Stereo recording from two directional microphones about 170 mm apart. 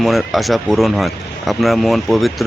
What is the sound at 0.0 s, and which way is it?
Speech, centre (ahead or behind).